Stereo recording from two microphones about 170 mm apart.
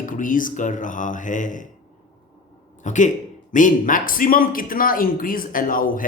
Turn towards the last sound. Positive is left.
turn(degrees=55)  # may be behind; listen again after turning